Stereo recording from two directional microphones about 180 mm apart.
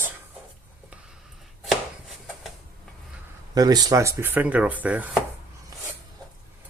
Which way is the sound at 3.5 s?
20° right (ahead or behind).